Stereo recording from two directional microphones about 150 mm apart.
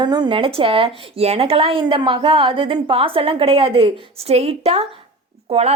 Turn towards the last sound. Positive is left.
turn(degrees=-45)  # may be behind; listen again after turning